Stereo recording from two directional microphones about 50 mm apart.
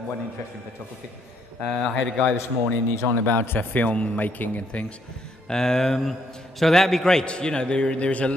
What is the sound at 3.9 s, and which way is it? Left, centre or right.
Speech, left.